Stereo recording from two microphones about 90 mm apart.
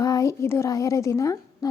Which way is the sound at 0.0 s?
40° left (ahead or behind).